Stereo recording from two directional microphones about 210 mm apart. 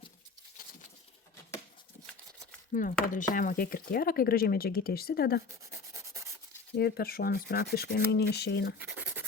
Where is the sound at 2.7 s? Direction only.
40° left (ahead or behind).